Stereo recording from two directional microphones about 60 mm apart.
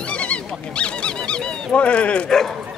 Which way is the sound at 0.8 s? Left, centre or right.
Centre.